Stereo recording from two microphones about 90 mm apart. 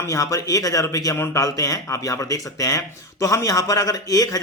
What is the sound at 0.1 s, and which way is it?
Speech, 40° left (ahead or behind).